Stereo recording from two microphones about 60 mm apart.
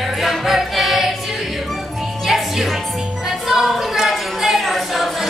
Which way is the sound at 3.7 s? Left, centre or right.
Centre.